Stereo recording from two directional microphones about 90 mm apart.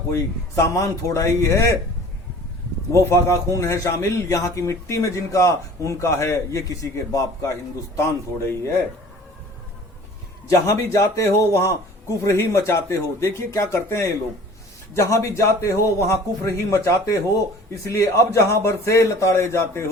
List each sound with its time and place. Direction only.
0.1 s a man's voice: 35° left (ahead or behind)
2.9 s a man's voice: 35° left (ahead or behind)
10.5 s a man's voice: 35° left (ahead or behind)